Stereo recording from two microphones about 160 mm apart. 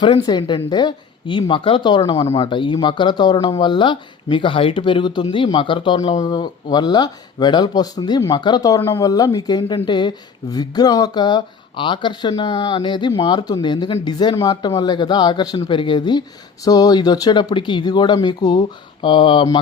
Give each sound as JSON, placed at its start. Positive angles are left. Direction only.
{"t": 0.0, "sound": "speech", "side_deg": 25}